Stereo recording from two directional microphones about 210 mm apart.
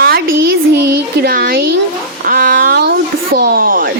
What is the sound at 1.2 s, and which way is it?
Speech, 45° right (ahead or behind).